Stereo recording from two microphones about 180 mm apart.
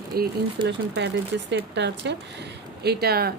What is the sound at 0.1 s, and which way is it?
Speech, 60° right (ahead or behind).